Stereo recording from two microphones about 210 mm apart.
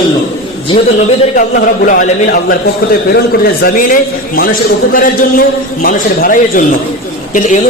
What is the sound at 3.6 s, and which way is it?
Speech, 45° left (ahead or behind).